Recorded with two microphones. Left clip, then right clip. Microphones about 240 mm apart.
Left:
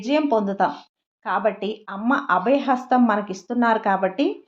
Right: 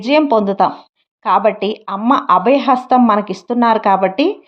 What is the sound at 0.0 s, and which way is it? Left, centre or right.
A woman's voice, right.